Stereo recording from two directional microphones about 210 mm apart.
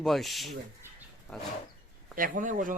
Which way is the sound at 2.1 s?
40° right (ahead or behind).